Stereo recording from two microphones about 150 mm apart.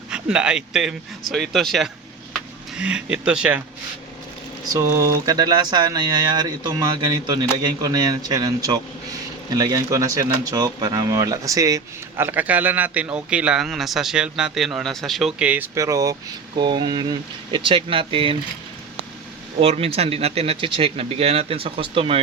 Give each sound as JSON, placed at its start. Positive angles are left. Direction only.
{"t": 0.1, "sound": "speech", "side_deg": -5}
{"t": 4.7, "sound": "speech", "side_deg": -20}
{"t": 19.5, "sound": "speech", "side_deg": -40}